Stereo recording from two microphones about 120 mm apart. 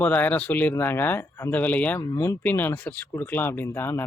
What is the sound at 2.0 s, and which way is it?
Speech, 25° left (ahead or behind).